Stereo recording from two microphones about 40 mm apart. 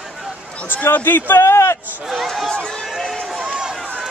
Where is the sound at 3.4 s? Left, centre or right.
Centre.